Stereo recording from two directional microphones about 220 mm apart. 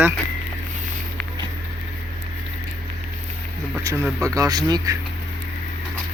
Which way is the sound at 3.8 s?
10° right (ahead or behind).